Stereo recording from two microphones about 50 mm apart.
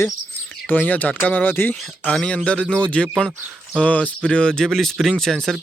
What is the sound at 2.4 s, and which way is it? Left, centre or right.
Speech, left.